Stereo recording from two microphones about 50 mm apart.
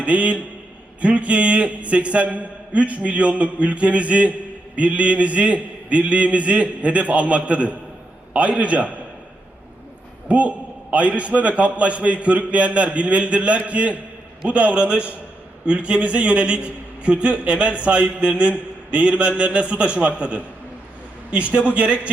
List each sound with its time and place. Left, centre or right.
0.0 s a man's voice: right
10.2 s a man's voice: right